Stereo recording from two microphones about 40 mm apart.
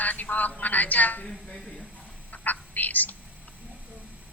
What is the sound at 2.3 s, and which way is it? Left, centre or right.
Speech, left.